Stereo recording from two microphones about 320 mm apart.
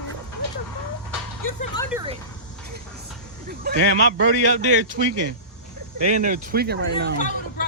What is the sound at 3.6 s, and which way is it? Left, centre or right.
Speech, right.